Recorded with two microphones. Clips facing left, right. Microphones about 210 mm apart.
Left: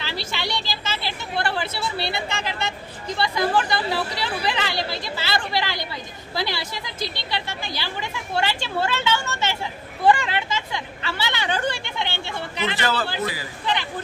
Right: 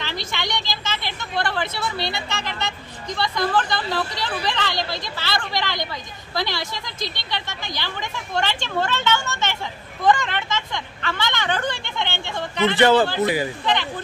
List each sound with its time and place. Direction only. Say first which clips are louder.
0.0 s speech: even; 5° left (ahead or behind)
12.7 s a man's voice: right 11 dB; 25° right (ahead or behind)